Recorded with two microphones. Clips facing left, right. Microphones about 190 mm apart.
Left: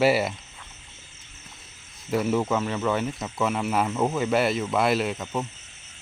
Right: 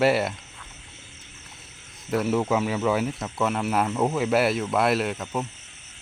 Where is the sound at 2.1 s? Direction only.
Centre (ahead or behind).